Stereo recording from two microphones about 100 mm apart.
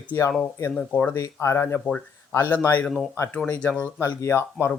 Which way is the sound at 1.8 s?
10° left (ahead or behind).